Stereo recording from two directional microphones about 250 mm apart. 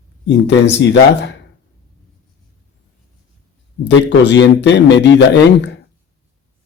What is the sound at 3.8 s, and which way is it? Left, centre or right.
A man's voice, left.